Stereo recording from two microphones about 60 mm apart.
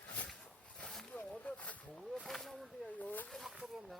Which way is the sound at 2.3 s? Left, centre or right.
Centre.